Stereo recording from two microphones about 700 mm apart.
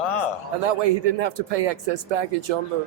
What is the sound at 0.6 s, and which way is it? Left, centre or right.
A man's voice, right.